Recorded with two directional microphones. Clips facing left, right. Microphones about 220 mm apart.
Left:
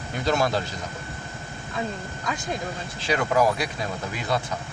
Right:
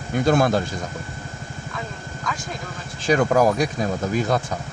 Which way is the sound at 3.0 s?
45° right (ahead or behind).